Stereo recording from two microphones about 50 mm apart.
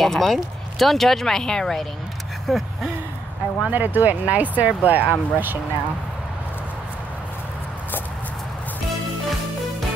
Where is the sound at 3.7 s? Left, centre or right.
Right.